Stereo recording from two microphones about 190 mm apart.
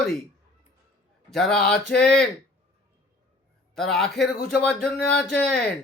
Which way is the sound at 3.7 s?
Centre (ahead or behind).